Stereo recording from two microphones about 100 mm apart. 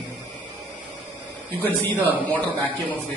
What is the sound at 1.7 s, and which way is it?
Speech, 20° right (ahead or behind).